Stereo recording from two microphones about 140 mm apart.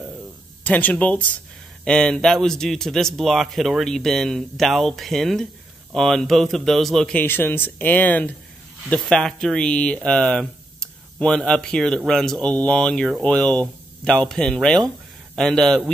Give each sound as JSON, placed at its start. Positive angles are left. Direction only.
{"t": 0.7, "sound": "a man's voice", "side_deg": 10}